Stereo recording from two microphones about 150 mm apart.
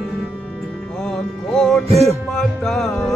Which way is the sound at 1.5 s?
5° left (ahead or behind).